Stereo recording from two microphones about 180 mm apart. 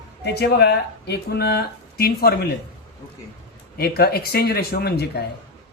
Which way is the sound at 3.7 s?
60° left (ahead or behind).